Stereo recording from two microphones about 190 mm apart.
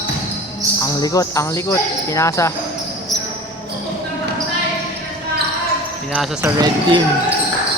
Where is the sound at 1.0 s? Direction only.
20° left (ahead or behind).